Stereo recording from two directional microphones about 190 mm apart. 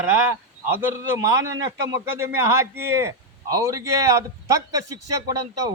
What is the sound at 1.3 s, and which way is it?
A man's voice, 15° right (ahead or behind).